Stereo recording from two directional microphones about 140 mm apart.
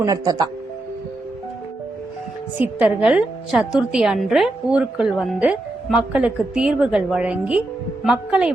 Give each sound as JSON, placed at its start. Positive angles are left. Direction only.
{"t": 0.0, "sound": "speech", "side_deg": -25}
{"t": 2.6, "sound": "a woman's voice", "side_deg": -5}